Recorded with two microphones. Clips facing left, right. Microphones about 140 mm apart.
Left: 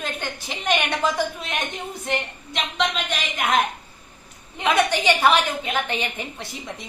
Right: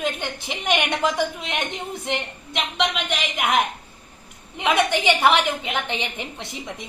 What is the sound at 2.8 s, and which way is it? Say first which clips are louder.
Speech: even; 15° right (ahead or behind).